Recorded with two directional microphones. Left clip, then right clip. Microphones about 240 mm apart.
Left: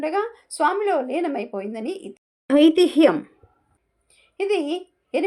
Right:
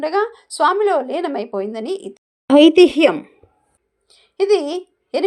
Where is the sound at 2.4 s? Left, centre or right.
Right.